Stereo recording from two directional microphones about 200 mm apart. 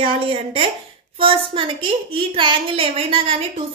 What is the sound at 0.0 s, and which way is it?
A woman's voice, 25° right (ahead or behind).